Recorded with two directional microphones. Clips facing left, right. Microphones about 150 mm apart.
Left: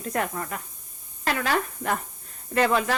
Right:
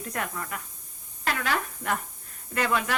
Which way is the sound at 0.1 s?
35° left (ahead or behind).